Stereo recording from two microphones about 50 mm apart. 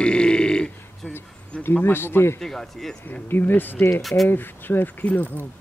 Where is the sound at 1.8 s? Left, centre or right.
Left.